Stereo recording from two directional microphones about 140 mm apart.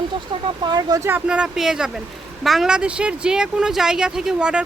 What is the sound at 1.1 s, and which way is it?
Speech, 5° right (ahead or behind).